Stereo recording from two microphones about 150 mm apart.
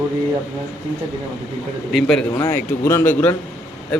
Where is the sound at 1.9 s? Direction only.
5° left (ahead or behind).